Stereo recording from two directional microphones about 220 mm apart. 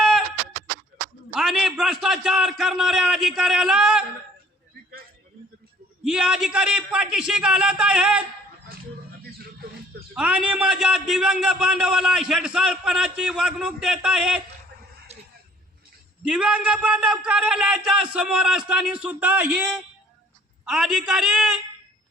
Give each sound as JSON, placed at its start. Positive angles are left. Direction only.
{"t": 1.3, "sound": "a man's voice", "side_deg": 0}
{"t": 6.1, "sound": "a man's voice", "side_deg": -5}
{"t": 10.2, "sound": "a man's voice", "side_deg": -5}
{"t": 15.1, "sound": "a sound", "side_deg": -30}
{"t": 16.2, "sound": "a man's voice", "side_deg": -5}